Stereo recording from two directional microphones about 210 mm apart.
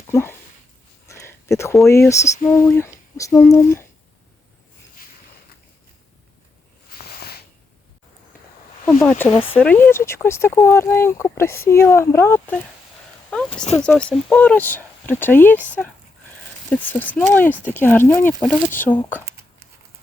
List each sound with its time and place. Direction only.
0.1 s speech: 10° left (ahead or behind)
1.0 s a sound: 15° left (ahead or behind)
1.9 s speech: 15° left (ahead or behind)
7.0 s a sound: 50° left (ahead or behind)
8.9 s speech: 10° left (ahead or behind)
13.8 s speech: 5° left (ahead or behind)
16.6 s speech: 10° left (ahead or behind)